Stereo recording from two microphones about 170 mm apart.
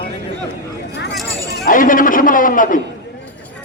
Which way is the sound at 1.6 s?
55° left (ahead or behind).